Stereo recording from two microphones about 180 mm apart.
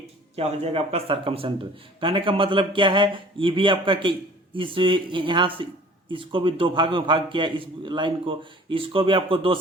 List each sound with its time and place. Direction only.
0.3 s a man's voice: 35° right (ahead or behind)